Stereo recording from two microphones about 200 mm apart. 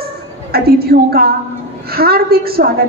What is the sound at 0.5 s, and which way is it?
A woman's voice, 50° right (ahead or behind).